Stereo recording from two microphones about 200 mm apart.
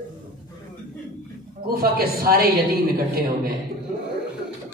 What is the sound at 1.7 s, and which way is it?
A woman's voice, 50° right (ahead or behind).